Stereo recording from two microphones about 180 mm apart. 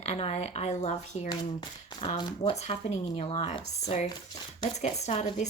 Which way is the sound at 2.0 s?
30° left (ahead or behind).